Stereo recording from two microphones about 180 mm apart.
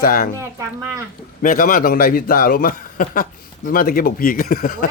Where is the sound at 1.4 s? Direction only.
50° left (ahead or behind).